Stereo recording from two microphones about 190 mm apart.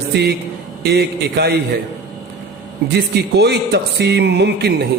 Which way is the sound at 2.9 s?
60° right (ahead or behind).